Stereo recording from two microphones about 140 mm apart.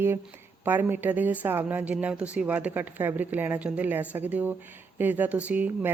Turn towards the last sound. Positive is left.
turn(degrees=-10)  # may be behind; listen again after turning